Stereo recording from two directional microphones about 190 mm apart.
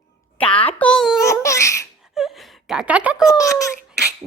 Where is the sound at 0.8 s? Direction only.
5° left (ahead or behind).